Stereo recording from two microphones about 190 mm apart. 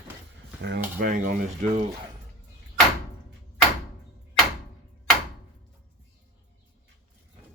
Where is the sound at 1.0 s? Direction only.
45° right (ahead or behind).